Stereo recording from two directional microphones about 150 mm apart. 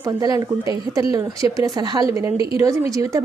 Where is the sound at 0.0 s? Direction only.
25° right (ahead or behind).